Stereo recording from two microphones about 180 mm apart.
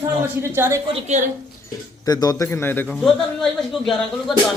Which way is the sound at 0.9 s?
40° right (ahead or behind).